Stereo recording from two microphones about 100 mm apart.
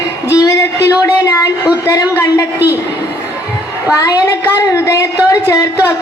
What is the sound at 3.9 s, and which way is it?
A woman's voice, 35° left (ahead or behind).